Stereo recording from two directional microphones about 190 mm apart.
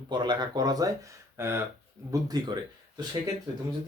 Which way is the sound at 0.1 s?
25° right (ahead or behind).